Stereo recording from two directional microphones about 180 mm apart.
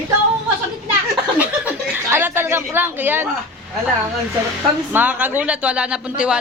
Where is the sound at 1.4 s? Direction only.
10° right (ahead or behind).